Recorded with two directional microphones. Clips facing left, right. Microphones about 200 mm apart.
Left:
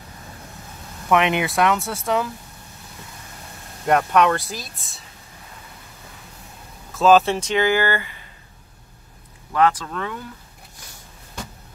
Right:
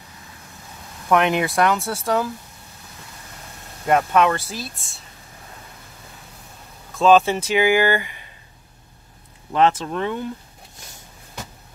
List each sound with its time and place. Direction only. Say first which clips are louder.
1.0 s speech: right 1 dB; centre (ahead or behind)
3.8 s speech: even; centre (ahead or behind)
6.9 s speech: even; centre (ahead or behind); by 8.3 s 15° right (ahead or behind)
9.5 s speech: right 1 dB; 25° right (ahead or behind)